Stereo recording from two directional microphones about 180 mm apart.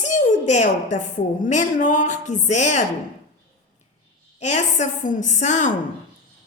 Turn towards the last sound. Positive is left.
turn(degrees=40)  # may be behind; listen again after turning